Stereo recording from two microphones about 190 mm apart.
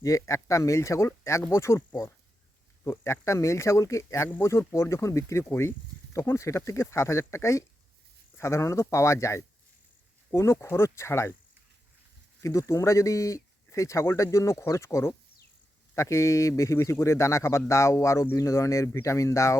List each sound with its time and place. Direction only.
0.0 s speech: 15° left (ahead or behind)
12.4 s speech: 15° left (ahead or behind)